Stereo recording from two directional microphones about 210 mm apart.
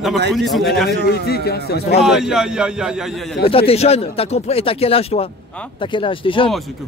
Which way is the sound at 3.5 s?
25° left (ahead or behind).